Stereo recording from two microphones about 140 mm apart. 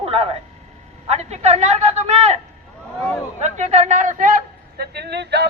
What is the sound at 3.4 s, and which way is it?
A man's voice, 55° right (ahead or behind).